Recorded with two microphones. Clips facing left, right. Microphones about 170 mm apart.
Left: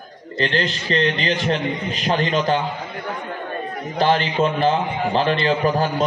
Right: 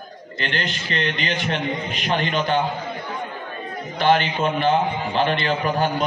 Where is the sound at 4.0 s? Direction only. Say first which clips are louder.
Left 1 dB; 35° left (ahead or behind).